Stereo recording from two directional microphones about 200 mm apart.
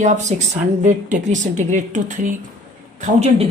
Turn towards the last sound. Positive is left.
turn(degrees=-35)  # may be behind; listen again after turning